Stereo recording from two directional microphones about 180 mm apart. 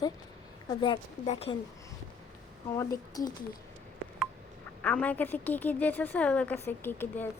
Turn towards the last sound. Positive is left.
turn(degrees=10)  # may be behind; listen again after turning